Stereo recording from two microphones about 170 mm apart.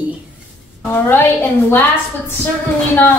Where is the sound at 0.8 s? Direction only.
15° left (ahead or behind).